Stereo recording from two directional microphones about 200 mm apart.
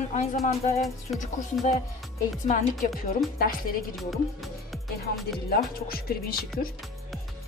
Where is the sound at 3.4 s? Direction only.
45° left (ahead or behind).